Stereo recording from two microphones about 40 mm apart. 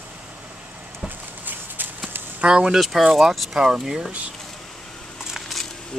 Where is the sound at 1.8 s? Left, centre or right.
Right.